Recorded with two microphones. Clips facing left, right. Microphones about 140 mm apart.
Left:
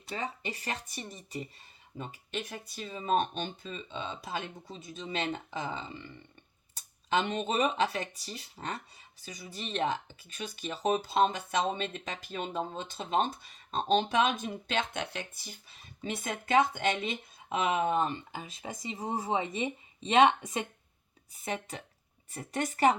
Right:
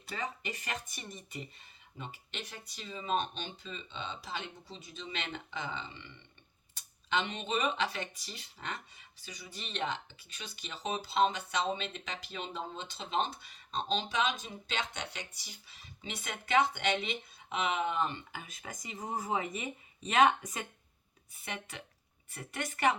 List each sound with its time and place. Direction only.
0.1 s speech: 30° left (ahead or behind)
2.0 s speech: 45° left (ahead or behind)
7.1 s speech: 45° left (ahead or behind)